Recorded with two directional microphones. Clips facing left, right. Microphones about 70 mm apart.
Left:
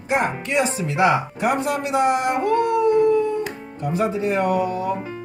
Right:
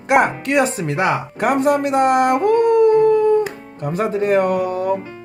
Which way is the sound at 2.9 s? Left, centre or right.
Right.